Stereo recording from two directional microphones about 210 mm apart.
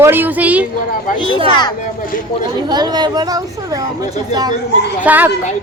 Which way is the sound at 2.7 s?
20° right (ahead or behind).